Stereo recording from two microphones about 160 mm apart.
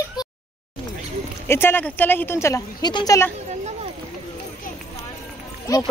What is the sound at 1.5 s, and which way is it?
A woman's voice, 15° left (ahead or behind).